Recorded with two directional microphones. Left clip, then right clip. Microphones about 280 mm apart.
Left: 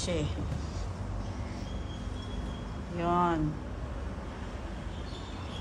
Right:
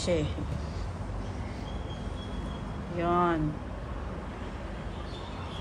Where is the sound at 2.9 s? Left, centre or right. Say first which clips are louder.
Right 1 dB; centre.